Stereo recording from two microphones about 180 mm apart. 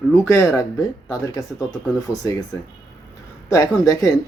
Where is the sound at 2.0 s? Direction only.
20° left (ahead or behind).